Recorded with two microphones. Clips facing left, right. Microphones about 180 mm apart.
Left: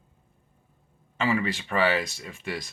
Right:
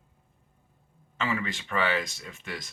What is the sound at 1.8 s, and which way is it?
Speech, 10° left (ahead or behind).